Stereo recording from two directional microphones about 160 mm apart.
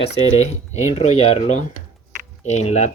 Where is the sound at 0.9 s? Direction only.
40° left (ahead or behind).